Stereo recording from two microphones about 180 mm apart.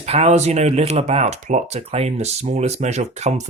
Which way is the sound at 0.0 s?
35° right (ahead or behind).